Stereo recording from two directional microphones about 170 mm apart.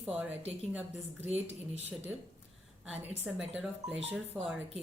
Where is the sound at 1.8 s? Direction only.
40° right (ahead or behind).